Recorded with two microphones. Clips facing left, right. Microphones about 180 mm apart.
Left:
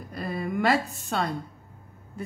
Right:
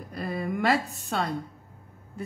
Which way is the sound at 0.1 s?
Centre (ahead or behind).